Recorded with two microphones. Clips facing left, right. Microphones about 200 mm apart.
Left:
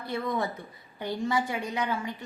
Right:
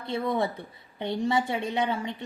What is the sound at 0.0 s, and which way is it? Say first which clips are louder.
A woman's voice: right 3 dB; 25° right (ahead or behind).